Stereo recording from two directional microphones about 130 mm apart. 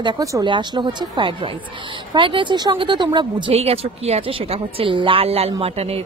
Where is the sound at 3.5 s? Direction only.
50° right (ahead or behind).